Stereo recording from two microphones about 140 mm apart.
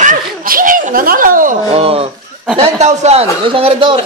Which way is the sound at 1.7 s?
45° right (ahead or behind).